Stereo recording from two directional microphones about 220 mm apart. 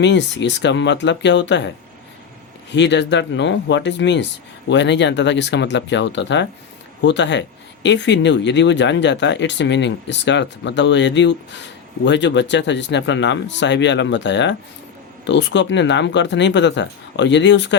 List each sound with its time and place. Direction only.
0.0 s speech: 55° left (ahead or behind)
2.7 s speech: 50° left (ahead or behind)